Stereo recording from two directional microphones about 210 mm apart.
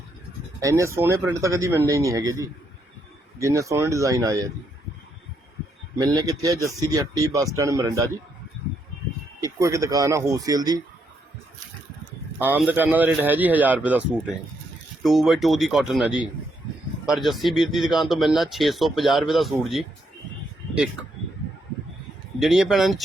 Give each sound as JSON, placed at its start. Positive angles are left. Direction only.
{"t": 0.6, "sound": "speech", "side_deg": -15}
{"t": 6.0, "sound": "speech", "side_deg": -15}
{"t": 9.4, "sound": "speech", "side_deg": -15}
{"t": 12.4, "sound": "speech", "side_deg": -10}
{"t": 15.0, "sound": "speech", "side_deg": 0}
{"t": 22.4, "sound": "speech", "side_deg": 0}